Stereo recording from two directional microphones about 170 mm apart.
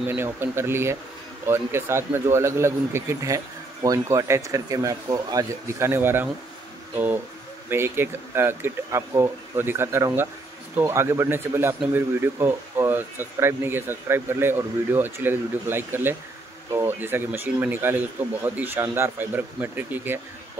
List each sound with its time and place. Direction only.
0.0 s speech: 15° right (ahead or behind)
7.7 s speech: 15° right (ahead or behind)